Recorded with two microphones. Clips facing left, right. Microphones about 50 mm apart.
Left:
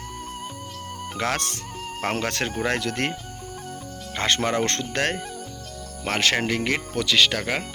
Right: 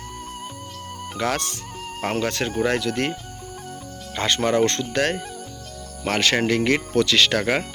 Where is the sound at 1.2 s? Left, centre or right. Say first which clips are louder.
Right 2 dB; left.